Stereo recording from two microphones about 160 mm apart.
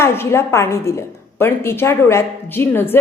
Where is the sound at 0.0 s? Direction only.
15° left (ahead or behind).